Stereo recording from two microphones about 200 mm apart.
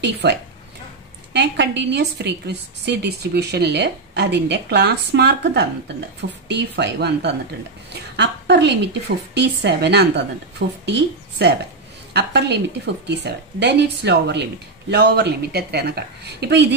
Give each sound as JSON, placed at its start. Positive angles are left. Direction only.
{"t": 0.0, "sound": "a woman's voice", "side_deg": -60}